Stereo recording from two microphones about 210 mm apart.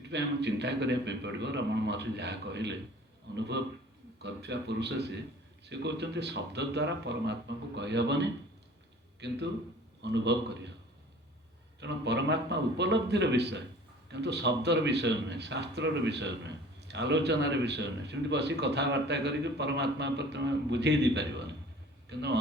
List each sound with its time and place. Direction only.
0.1 s speech: 55° right (ahead or behind)
10.0 s speech: 55° right (ahead or behind)
11.8 s speech: 55° right (ahead or behind)